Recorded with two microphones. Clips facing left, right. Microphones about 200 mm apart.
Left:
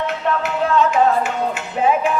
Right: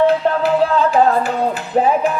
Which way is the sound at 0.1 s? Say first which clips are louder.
Right 6 dB; 35° right (ahead or behind).